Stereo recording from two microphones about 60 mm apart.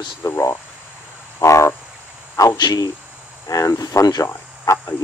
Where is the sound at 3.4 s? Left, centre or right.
Left.